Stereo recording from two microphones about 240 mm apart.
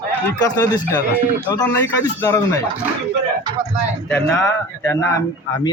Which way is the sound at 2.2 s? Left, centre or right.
Centre.